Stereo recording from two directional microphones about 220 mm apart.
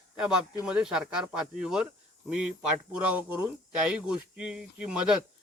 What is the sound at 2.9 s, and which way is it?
Speech, 5° right (ahead or behind).